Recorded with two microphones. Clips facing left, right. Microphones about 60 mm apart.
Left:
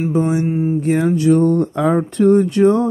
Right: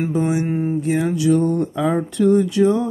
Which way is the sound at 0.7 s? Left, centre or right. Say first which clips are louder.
Left 4 dB; left.